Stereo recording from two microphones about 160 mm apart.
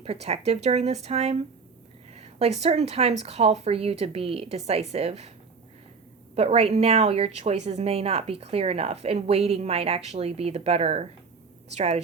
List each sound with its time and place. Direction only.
0.0 s a woman's voice: 40° right (ahead or behind)
6.3 s a woman's voice: 40° right (ahead or behind)